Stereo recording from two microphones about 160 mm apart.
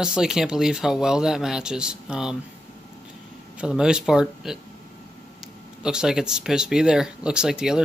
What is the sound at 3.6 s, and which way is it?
Speech, 5° right (ahead or behind).